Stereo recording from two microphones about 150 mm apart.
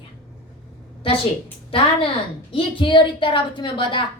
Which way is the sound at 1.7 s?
35° left (ahead or behind).